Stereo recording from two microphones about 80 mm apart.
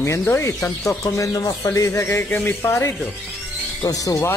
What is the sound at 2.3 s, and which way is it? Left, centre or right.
Speech, left.